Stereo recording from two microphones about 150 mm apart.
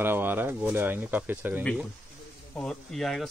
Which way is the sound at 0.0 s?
15° right (ahead or behind).